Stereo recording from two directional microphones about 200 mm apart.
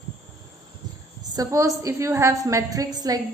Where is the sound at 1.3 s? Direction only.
15° right (ahead or behind).